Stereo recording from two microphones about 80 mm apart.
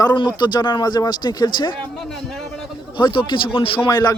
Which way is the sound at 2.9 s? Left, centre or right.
Left.